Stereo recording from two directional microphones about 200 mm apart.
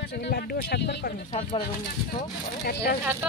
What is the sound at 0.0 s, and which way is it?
Speech, 55° left (ahead or behind).